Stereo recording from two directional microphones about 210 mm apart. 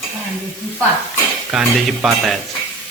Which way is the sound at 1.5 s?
Centre (ahead or behind).